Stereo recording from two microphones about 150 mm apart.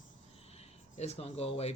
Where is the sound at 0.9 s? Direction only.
40° left (ahead or behind).